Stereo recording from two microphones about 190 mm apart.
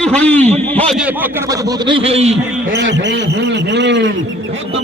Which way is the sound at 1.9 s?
30° right (ahead or behind).